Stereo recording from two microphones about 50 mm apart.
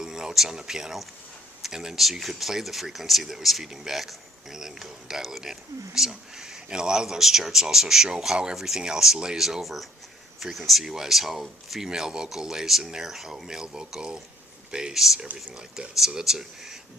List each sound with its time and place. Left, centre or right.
0.0 s speech: centre
15.5 s speech: centre